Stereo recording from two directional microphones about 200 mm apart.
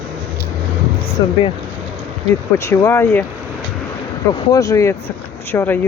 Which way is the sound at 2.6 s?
15° left (ahead or behind).